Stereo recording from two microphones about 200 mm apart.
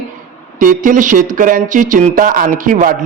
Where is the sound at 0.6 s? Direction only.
40° right (ahead or behind).